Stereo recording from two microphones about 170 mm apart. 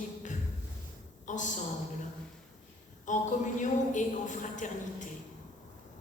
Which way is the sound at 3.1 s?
45° left (ahead or behind).